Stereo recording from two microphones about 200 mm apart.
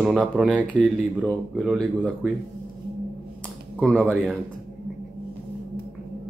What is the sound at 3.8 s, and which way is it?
Speech, centre (ahead or behind).